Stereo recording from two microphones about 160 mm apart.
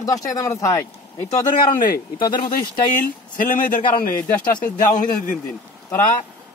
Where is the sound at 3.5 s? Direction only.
60° left (ahead or behind).